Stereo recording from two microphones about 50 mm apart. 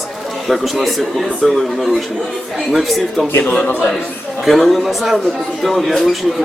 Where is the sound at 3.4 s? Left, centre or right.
Left.